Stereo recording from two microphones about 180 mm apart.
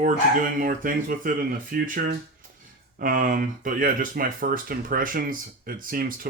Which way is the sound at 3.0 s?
50° right (ahead or behind).